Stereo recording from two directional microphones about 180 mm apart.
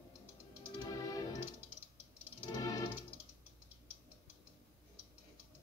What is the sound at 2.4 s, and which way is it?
Music, 20° left (ahead or behind).